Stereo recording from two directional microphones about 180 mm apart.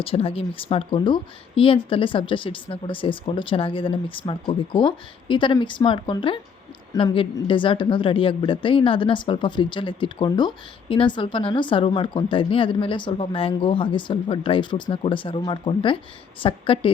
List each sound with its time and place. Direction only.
0.0 s a woman's voice: 30° left (ahead or behind)